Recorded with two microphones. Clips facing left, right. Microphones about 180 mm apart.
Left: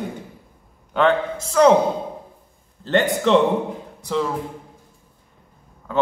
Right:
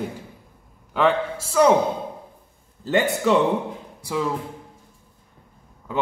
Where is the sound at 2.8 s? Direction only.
10° right (ahead or behind).